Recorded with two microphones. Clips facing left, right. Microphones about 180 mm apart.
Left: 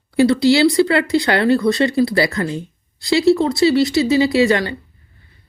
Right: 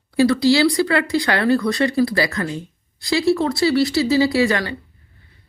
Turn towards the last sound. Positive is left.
turn(degrees=25)  # may be behind; listen again after turning